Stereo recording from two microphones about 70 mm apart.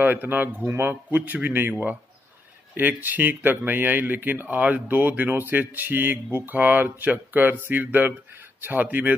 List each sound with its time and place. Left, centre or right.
0.0 s speech: right